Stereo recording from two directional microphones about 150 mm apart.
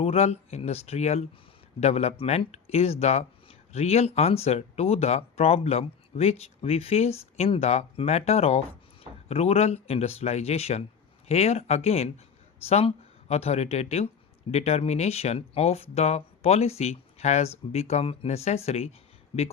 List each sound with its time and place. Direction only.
0.0 s speech: 45° left (ahead or behind)